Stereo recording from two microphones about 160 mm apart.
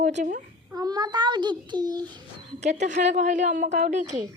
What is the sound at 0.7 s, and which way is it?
A child's voice, 25° right (ahead or behind).